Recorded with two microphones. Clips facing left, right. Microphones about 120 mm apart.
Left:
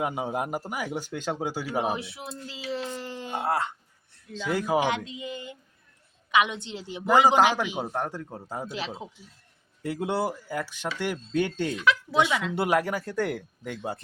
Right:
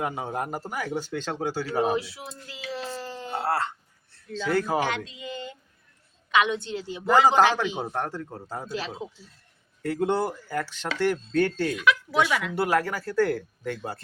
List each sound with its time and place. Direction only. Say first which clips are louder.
0.0 s speech: left 1 dB; 10° left (ahead or behind)
2.0 s a sound: right 3 dB; 25° left (ahead or behind)
4.1 s speech: right 3 dB; 15° left (ahead or behind)